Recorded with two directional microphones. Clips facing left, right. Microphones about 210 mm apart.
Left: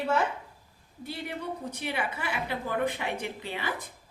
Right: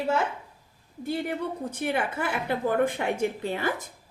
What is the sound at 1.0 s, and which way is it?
A woman's voice, 50° right (ahead or behind).